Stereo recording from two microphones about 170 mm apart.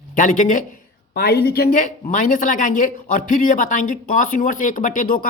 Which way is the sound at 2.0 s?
50° left (ahead or behind).